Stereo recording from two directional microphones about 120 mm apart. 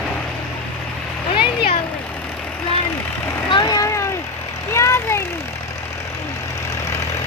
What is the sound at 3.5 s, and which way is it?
Vehicle, 35° left (ahead or behind).